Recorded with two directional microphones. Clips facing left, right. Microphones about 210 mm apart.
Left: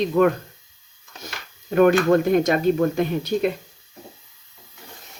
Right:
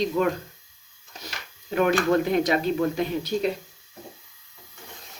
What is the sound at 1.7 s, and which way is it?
Speech, 45° left (ahead or behind).